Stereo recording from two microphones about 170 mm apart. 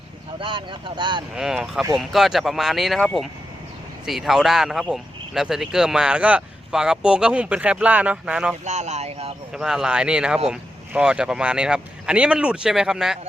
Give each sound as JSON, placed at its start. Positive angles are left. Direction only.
{"t": 0.3, "sound": "speech", "side_deg": -30}
{"t": 1.4, "sound": "speech", "side_deg": 0}
{"t": 8.6, "sound": "a man's voice", "side_deg": -40}
{"t": 9.5, "sound": "speech", "side_deg": -5}